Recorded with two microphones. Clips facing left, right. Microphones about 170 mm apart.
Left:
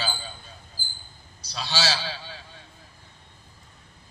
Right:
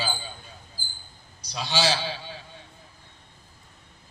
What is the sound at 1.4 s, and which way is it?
Speech, 15° right (ahead or behind).